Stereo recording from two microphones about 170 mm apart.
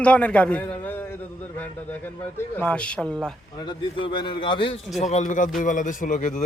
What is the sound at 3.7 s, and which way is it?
A man's voice, 30° left (ahead or behind).